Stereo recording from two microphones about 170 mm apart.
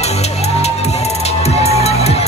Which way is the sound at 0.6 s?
40° left (ahead or behind).